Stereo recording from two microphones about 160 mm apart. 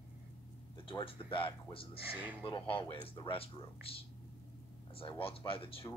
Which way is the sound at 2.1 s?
10° right (ahead or behind).